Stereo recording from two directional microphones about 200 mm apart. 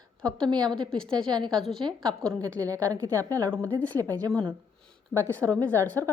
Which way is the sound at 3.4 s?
5° left (ahead or behind).